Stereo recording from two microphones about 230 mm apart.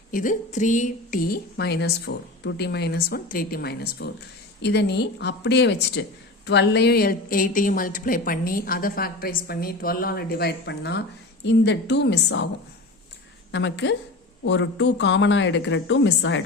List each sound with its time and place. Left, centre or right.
0.1 s a woman's voice: left
13.5 s a woman's voice: left